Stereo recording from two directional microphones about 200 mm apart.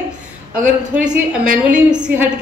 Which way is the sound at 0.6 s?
40° right (ahead or behind).